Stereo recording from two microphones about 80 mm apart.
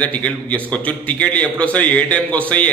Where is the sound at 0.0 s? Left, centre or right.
Centre.